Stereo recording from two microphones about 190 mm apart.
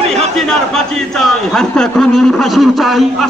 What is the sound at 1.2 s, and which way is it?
A man's voice, 5° left (ahead or behind).